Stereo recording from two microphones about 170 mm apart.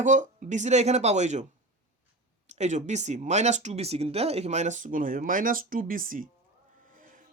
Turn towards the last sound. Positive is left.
turn(degrees=-50)  # may be behind; listen again after turning